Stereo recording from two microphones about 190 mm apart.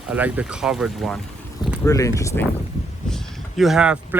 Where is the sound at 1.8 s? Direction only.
15° left (ahead or behind).